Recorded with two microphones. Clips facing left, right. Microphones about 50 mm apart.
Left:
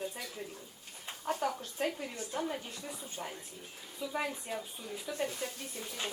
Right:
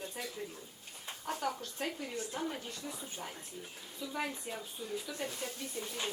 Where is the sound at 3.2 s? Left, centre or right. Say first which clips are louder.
Left 2 dB; centre.